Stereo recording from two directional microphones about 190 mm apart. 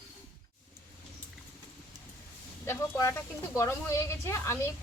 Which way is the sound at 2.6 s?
10° left (ahead or behind).